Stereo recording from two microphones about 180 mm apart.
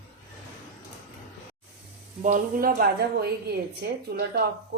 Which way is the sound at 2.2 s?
45° right (ahead or behind).